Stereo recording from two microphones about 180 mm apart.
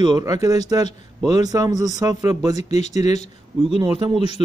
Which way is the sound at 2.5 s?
40° left (ahead or behind).